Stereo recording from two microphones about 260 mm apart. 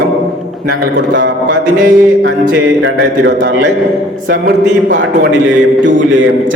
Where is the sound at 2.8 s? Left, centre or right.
Right.